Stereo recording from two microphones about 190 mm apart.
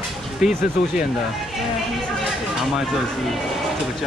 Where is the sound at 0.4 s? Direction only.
Centre (ahead or behind).